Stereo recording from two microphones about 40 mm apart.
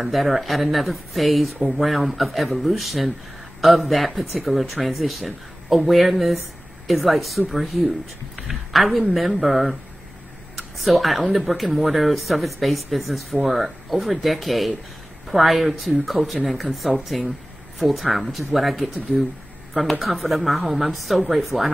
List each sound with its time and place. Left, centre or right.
0.0 s speech: centre
10.8 s speech: centre